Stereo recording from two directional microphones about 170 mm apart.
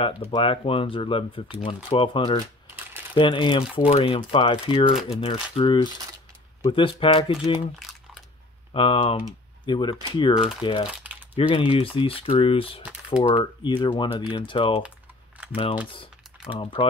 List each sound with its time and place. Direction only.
0.0 s speech: 30° left (ahead or behind)
2.7 s crumpling: 10° right (ahead or behind)
3.2 s speech: 30° left (ahead or behind)
8.7 s speech: 30° left (ahead or behind)
15.9 s typing: 30° left (ahead or behind)